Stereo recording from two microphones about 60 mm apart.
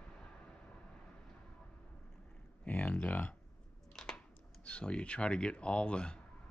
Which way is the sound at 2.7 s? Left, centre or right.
Left.